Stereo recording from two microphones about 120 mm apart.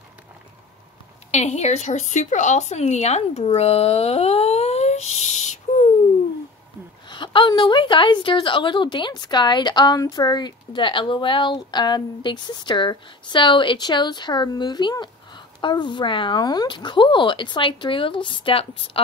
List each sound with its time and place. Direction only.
1.3 s a woman's voice: 70° left (ahead or behind)
7.1 s a woman's voice: 40° left (ahead or behind)